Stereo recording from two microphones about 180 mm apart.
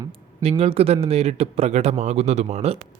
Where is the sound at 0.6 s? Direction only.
35° right (ahead or behind).